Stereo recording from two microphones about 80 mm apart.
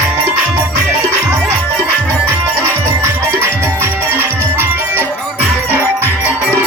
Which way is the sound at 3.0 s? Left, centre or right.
Right.